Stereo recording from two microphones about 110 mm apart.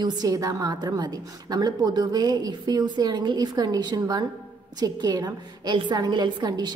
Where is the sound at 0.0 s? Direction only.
35° right (ahead or behind).